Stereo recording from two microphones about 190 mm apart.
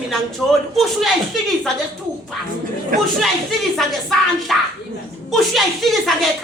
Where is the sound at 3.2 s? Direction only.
Centre (ahead or behind).